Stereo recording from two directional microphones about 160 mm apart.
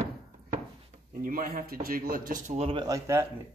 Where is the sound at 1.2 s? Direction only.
60° right (ahead or behind).